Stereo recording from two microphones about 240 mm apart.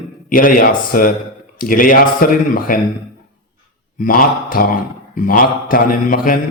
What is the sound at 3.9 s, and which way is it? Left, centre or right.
A man's voice, left.